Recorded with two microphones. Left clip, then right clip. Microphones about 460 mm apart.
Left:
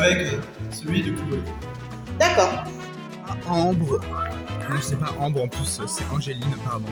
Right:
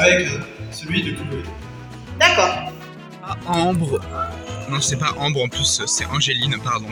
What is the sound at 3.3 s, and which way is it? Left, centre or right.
Speech, left.